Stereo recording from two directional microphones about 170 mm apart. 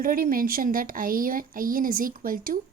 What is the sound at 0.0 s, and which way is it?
A woman's voice, 55° right (ahead or behind).